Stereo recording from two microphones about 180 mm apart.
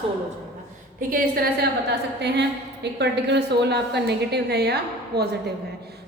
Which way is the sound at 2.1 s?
70° right (ahead or behind).